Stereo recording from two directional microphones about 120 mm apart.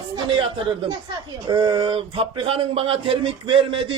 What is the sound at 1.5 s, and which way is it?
A man's voice, 40° right (ahead or behind).